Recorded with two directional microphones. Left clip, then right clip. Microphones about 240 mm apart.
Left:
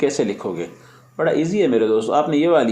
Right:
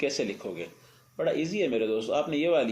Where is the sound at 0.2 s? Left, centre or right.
Centre.